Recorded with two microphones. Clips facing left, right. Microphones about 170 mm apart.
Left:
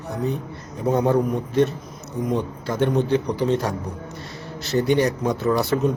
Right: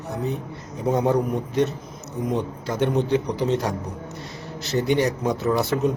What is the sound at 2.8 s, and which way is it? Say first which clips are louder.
Speech: left 1 dB; 20° right (ahead or behind).